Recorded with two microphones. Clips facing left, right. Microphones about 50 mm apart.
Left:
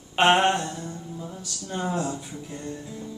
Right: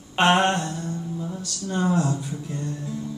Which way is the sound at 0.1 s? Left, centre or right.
Centre.